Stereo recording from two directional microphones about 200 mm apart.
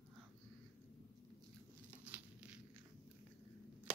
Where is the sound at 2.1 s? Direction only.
5° right (ahead or behind).